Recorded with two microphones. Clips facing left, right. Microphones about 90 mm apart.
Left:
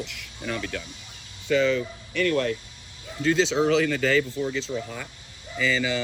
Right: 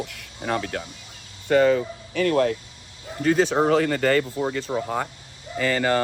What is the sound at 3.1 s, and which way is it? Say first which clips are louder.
Speech: right 2 dB; 50° right (ahead or behind).